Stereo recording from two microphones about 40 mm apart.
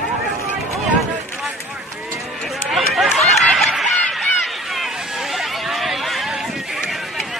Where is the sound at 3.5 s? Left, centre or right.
Centre.